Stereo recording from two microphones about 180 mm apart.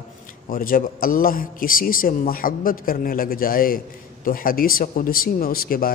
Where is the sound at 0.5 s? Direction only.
50° left (ahead or behind).